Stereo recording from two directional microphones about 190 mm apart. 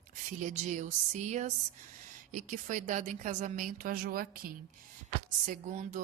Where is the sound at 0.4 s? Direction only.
40° right (ahead or behind).